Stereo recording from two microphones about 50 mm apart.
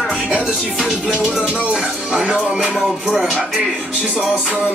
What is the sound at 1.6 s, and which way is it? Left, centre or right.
Speech, centre.